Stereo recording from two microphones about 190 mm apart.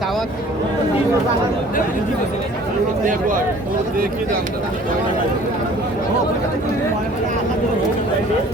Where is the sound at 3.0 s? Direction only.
45° right (ahead or behind).